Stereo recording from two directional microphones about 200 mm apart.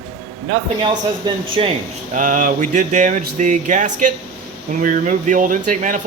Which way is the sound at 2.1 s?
40° right (ahead or behind).